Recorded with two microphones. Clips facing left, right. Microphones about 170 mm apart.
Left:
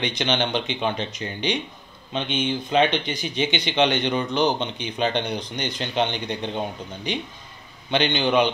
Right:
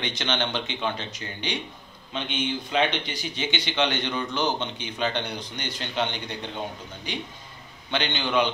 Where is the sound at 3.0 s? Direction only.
20° left (ahead or behind).